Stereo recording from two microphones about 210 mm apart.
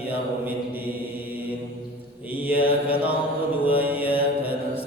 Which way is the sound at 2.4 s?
5° right (ahead or behind).